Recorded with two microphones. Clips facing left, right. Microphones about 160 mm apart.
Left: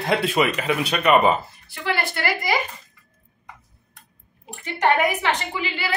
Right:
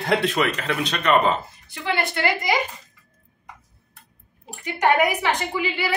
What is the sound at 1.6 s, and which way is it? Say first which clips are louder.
Speech: right 1 dB; 20° right (ahead or behind).